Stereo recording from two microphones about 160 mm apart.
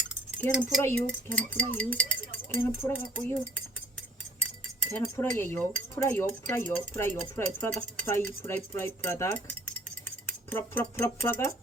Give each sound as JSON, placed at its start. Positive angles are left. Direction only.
{"t": 0.4, "sound": "speech", "side_deg": 15}
{"t": 4.9, "sound": "speech", "side_deg": 15}